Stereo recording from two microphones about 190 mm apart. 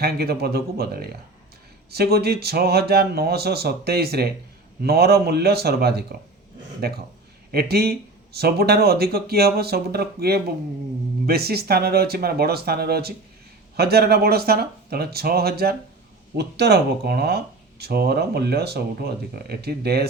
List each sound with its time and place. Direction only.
0.0 s speech: 55° right (ahead or behind)